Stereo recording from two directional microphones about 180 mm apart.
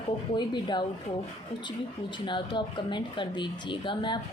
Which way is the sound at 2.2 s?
25° left (ahead or behind).